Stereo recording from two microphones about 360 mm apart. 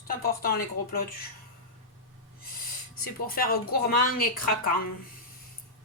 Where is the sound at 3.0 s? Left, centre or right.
Left.